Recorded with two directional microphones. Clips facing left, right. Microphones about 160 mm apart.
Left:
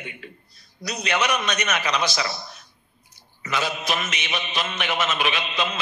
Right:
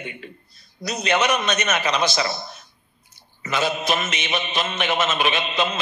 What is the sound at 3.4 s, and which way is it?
A man's voice, 25° right (ahead or behind).